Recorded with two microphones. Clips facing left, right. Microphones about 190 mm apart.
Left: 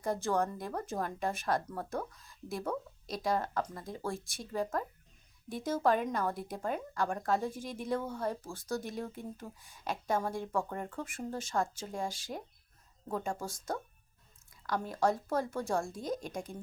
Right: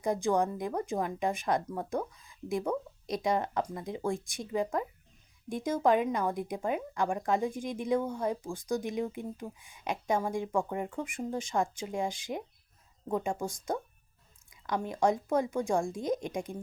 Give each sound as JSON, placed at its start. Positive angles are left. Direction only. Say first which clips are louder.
{"t": 0.0, "sound": "speech", "louder": "right 4 dB", "side_deg": -15}